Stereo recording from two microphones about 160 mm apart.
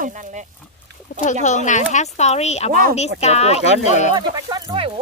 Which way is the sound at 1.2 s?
45° left (ahead or behind).